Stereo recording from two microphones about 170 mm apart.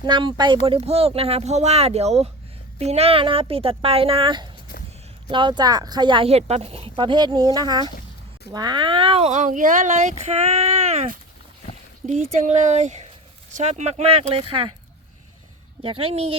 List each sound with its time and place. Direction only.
0.0 s speech: 25° right (ahead or behind)
12.0 s speech: 40° right (ahead or behind)
15.8 s speech: 35° right (ahead or behind)